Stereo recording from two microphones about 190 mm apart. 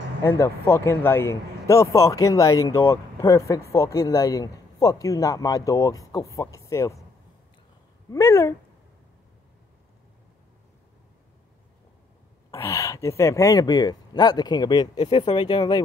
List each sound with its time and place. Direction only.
0.2 s speech: 15° left (ahead or behind)
8.1 s speech: 15° left (ahead or behind)
12.4 s speech: 15° left (ahead or behind)